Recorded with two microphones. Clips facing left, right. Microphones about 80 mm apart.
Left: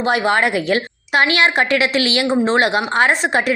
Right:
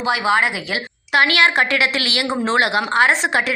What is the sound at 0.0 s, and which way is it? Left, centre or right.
Speech, left.